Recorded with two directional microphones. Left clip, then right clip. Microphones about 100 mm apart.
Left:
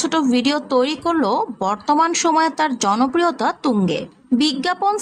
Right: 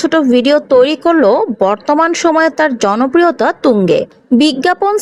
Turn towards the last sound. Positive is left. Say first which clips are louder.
# right 7 dB
turn(degrees=-40)  # may be behind; listen again after turning